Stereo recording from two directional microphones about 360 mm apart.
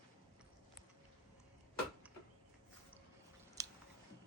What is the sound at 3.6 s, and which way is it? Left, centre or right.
Chewing, centre.